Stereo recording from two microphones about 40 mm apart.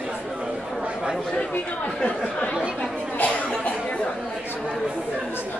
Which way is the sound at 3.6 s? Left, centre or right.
Left.